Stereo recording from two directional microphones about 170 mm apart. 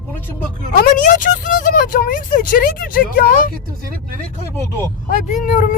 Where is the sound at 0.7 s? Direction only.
55° left (ahead or behind).